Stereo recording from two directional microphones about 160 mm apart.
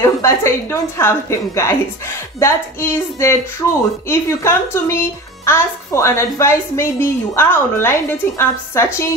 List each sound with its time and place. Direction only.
0.0 s a woman's voice: 15° left (ahead or behind)